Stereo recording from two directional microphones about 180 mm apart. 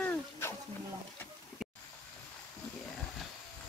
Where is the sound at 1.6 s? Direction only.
5° right (ahead or behind).